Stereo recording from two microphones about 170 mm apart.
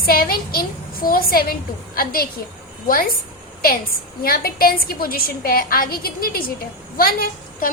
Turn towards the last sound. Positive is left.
turn(degrees=60)  # may be behind; listen again after turning